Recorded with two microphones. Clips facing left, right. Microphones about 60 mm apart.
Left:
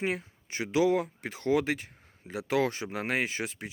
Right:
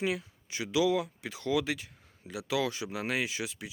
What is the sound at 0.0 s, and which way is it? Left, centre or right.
Speech, left.